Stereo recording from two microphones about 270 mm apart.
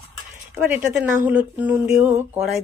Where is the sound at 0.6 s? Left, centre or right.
Centre.